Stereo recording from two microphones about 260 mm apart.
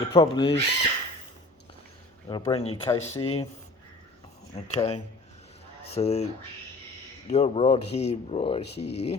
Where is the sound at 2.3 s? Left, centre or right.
Centre.